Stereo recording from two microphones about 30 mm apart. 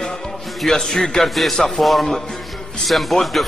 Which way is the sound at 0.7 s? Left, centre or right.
Centre.